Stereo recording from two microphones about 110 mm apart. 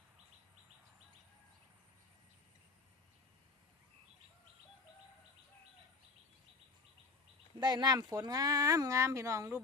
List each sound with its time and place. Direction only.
7.6 s speech: 40° right (ahead or behind)